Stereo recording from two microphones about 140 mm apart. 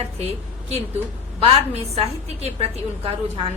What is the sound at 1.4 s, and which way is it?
A woman's voice, 45° right (ahead or behind).